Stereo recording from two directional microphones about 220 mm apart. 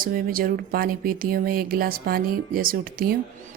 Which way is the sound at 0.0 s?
40° right (ahead or behind).